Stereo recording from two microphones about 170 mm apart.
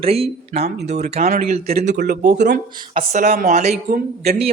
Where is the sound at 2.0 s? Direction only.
75° right (ahead or behind).